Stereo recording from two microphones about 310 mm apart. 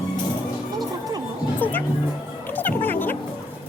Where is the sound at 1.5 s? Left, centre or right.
Centre.